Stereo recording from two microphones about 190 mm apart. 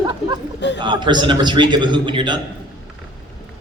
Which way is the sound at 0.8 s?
25° right (ahead or behind).